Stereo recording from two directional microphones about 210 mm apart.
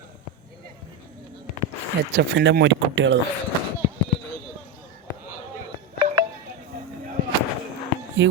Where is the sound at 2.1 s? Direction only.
60° right (ahead or behind).